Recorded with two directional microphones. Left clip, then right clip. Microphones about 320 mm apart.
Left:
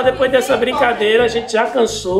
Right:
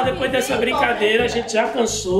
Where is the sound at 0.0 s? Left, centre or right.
Centre.